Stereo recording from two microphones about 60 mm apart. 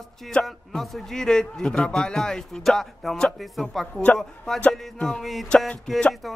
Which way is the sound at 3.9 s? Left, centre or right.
Left.